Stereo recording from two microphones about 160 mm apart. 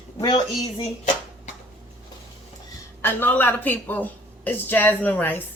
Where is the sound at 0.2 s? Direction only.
30° left (ahead or behind).